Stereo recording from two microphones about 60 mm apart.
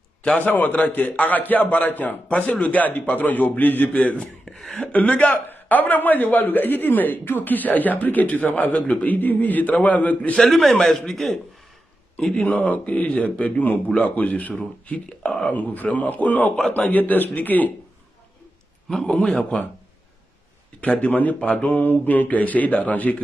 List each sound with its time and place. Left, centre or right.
0.4 s a man's voice: left
4.5 s a sound: centre
4.7 s a man's voice: left
10.3 s a man's voice: centre
12.2 s a man's voice: centre
14.6 s speech: centre
15.5 s a man's voice: left
18.9 s speech: centre
19.5 s a man's voice: centre
20.8 s a man's voice: left